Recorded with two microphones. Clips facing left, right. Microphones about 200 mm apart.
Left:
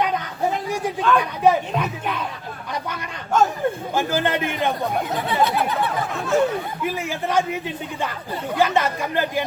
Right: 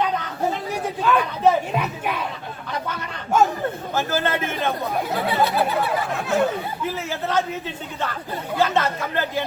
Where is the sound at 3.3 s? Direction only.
10° right (ahead or behind).